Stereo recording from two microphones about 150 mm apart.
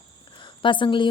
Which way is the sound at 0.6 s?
35° left (ahead or behind).